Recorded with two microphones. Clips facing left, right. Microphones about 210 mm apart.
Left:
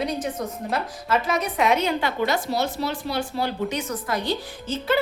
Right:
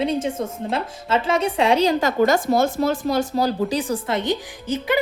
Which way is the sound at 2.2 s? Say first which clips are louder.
Right 9 dB; 50° right (ahead or behind).